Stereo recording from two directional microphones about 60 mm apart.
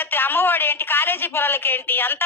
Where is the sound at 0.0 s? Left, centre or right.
Left.